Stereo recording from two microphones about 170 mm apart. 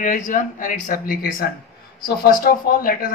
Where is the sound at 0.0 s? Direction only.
50° left (ahead or behind).